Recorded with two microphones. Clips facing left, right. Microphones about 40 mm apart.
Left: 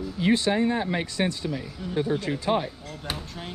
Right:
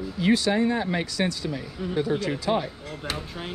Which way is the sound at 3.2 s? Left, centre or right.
Centre.